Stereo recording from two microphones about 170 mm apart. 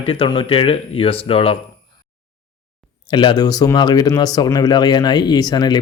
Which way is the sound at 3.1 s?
30° left (ahead or behind).